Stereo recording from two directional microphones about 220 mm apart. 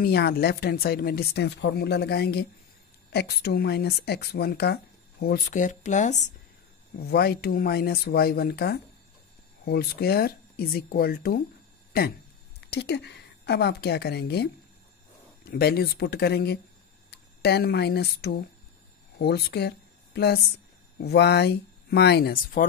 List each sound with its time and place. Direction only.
0.0 s speech: 45° left (ahead or behind)
7.0 s speech: 45° left (ahead or behind)
12.5 s a woman's voice: 50° left (ahead or behind)